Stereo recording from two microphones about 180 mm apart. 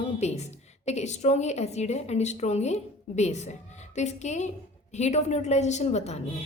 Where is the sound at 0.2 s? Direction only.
40° left (ahead or behind).